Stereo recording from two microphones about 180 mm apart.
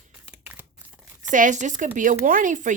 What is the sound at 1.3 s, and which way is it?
A woman's voice, 45° right (ahead or behind).